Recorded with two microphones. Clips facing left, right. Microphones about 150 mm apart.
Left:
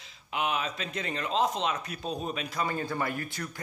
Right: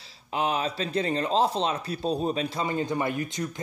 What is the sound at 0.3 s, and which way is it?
Speech, 35° right (ahead or behind).